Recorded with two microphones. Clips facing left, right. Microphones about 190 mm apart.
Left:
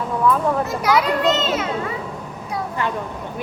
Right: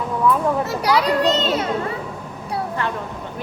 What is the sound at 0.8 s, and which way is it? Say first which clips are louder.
Speech: right 1 dB; 35° right (ahead or behind).